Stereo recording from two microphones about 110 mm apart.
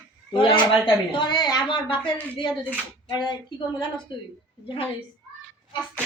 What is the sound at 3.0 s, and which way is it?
Child singing, 40° left (ahead or behind).